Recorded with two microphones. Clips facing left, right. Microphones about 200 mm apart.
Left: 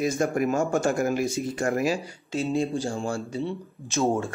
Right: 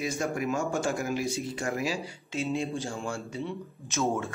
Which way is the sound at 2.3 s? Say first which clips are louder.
Left 5 dB; 35° left (ahead or behind).